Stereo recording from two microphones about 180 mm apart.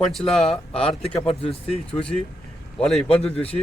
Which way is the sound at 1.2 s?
30° left (ahead or behind).